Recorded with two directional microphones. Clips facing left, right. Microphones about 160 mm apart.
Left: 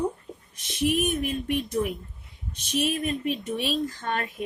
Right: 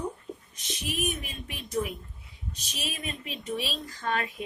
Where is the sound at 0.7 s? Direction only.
55° left (ahead or behind).